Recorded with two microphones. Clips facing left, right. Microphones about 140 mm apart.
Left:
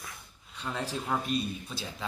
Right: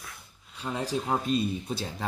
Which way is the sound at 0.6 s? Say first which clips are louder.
Right 3 dB; 10° right (ahead or behind).